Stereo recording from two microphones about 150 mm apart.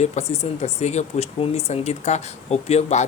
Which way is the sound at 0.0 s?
45° left (ahead or behind).